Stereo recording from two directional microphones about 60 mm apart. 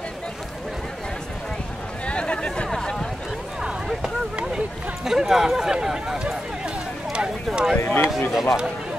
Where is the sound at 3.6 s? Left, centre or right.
Centre.